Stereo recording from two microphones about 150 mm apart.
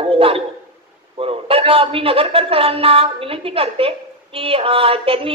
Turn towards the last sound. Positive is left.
turn(degrees=-35)  # may be behind; listen again after turning